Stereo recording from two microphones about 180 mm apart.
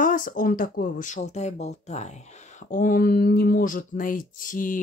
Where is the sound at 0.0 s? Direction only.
45° left (ahead or behind).